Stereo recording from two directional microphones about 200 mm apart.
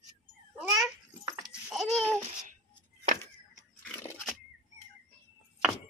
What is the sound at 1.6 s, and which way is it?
Babbling, 5° right (ahead or behind).